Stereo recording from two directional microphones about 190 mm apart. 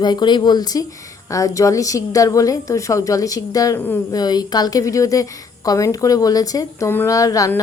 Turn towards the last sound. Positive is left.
turn(degrees=15)  # may be behind; listen again after turning